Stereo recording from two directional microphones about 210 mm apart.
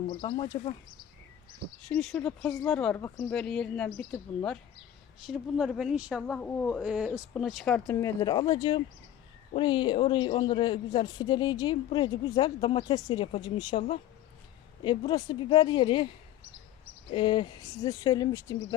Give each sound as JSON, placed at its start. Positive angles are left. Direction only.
{"t": 0.1, "sound": "speech", "side_deg": 25}
{"t": 1.9, "sound": "speech", "side_deg": 0}
{"t": 8.2, "sound": "speech", "side_deg": 20}
{"t": 17.2, "sound": "speech", "side_deg": 25}